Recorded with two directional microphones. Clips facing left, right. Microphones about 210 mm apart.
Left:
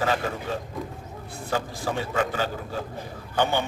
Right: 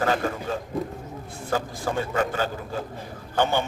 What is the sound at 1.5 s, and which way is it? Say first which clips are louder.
A man's voice: right 2 dB; 45° right (ahead or behind).